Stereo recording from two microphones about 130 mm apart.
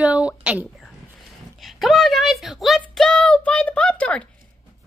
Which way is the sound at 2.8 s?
5° left (ahead or behind).